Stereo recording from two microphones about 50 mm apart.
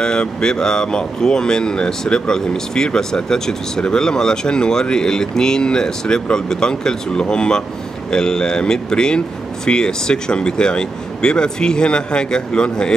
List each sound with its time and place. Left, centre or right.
0.0 s speech: centre